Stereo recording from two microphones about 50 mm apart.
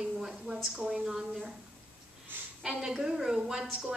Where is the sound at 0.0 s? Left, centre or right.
Centre.